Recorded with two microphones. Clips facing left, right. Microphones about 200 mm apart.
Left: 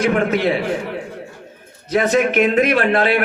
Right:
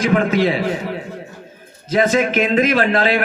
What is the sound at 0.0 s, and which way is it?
Speech, 60° left (ahead or behind).